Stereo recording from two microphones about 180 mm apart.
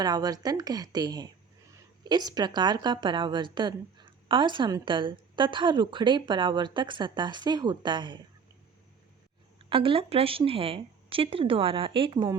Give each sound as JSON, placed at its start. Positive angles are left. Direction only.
{"t": 0.0, "sound": "a woman's voice", "side_deg": -20}
{"t": 9.6, "sound": "speech", "side_deg": -30}